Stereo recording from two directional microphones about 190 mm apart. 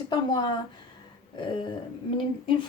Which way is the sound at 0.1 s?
20° left (ahead or behind).